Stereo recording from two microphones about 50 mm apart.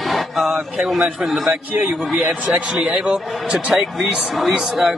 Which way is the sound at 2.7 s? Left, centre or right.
Centre.